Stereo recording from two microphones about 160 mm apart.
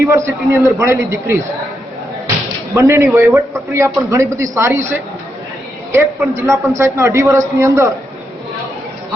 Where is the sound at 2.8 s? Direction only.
20° right (ahead or behind).